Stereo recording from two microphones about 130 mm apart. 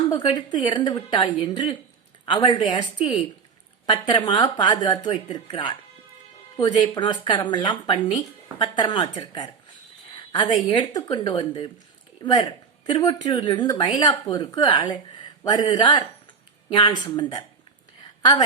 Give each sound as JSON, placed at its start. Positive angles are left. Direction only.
{"t": 0.1, "sound": "a woman's voice", "side_deg": 40}